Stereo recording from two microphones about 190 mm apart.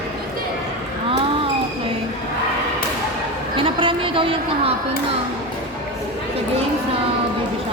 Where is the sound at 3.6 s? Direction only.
25° right (ahead or behind).